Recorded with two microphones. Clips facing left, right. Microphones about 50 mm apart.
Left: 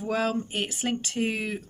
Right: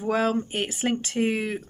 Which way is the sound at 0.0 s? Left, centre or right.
Centre.